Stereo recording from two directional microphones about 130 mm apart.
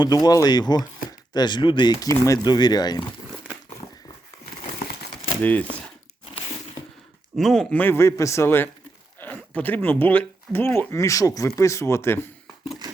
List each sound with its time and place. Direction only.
0.0 s speech: 30° left (ahead or behind)
5.4 s speech: 10° left (ahead or behind)
7.3 s speech: centre (ahead or behind); by 12.2 s 20° left (ahead or behind)